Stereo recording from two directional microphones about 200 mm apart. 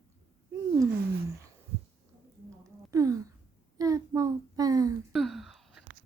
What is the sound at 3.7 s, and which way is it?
Child singing, 15° right (ahead or behind).